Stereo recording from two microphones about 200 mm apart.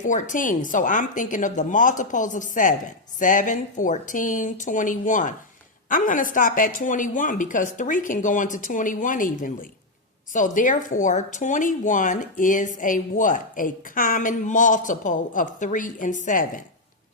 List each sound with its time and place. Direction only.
0.0 s speech: 40° left (ahead or behind)